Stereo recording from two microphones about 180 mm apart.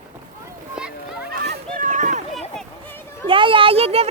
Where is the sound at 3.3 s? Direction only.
30° right (ahead or behind).